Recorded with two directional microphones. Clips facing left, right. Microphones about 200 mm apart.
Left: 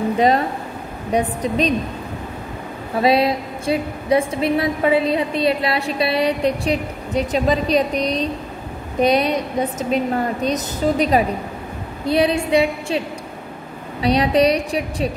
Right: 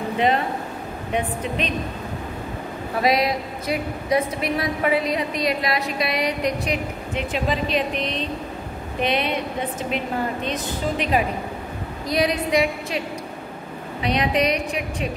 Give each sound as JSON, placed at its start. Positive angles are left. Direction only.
{"t": 1.1, "sound": "a woman's voice", "side_deg": 35}
{"t": 3.0, "sound": "a woman's voice", "side_deg": 30}
{"t": 14.0, "sound": "a woman's voice", "side_deg": 35}